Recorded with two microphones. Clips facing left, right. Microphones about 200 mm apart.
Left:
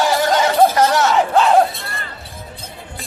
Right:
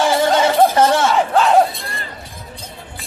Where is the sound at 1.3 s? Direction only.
Centre (ahead or behind).